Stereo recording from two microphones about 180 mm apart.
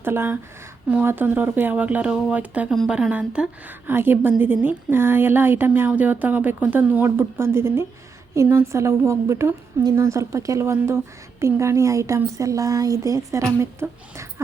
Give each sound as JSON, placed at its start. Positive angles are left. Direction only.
{"t": 0.0, "sound": "speech", "side_deg": -10}